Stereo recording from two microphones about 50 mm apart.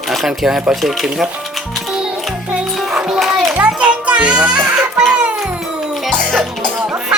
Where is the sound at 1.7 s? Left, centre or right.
Centre.